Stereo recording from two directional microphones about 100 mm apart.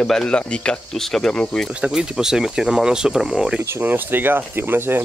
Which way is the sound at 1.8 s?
5° right (ahead or behind).